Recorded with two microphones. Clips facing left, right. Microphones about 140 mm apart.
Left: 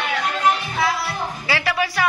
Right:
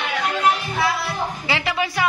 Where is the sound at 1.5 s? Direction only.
20° right (ahead or behind).